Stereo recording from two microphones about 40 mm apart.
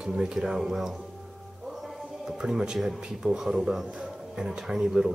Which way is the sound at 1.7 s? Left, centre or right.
Centre.